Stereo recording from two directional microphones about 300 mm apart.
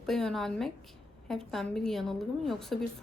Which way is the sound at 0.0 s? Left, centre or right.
Centre.